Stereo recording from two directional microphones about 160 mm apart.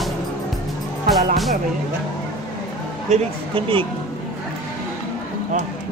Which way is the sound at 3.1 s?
35° right (ahead or behind).